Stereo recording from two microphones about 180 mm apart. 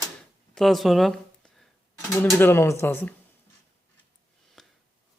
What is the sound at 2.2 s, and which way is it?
Speech, 10° left (ahead or behind).